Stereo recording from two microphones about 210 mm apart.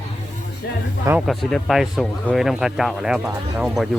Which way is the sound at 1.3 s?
Centre (ahead or behind).